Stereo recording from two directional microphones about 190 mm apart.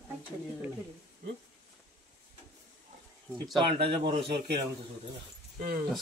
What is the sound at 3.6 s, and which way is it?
Speech, 25° right (ahead or behind).